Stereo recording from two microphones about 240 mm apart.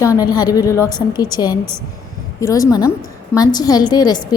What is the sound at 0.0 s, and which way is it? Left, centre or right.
A woman's voice, centre.